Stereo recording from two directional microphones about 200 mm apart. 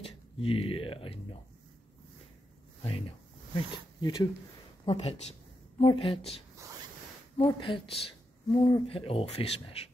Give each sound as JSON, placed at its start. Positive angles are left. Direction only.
{"t": 0.0, "sound": "speech", "side_deg": 30}
{"t": 3.5, "sound": "speech", "side_deg": 20}
{"t": 6.5, "sound": "a sound", "side_deg": -15}
{"t": 7.4, "sound": "speech", "side_deg": 25}